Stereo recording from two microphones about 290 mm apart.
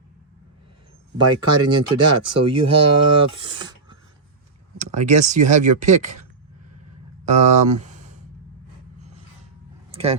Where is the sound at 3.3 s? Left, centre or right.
Centre.